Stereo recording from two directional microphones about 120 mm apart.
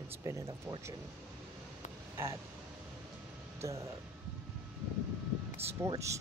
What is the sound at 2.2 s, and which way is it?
Speech, 20° right (ahead or behind).